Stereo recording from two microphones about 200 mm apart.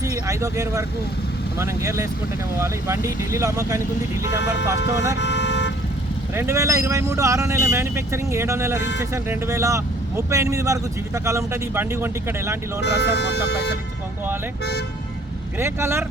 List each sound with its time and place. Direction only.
0.0 s speech: 15° right (ahead or behind)
4.3 s speech: 60° left (ahead or behind)
5.2 s vehicle: 60° left (ahead or behind)
6.3 s speech: 15° right (ahead or behind)
12.8 s speech: 55° left (ahead or behind)
15.5 s speech: 10° right (ahead or behind)